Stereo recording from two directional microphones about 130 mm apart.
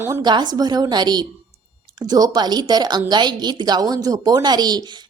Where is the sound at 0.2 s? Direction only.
35° right (ahead or behind).